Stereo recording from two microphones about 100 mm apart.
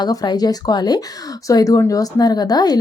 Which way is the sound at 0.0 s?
40° left (ahead or behind).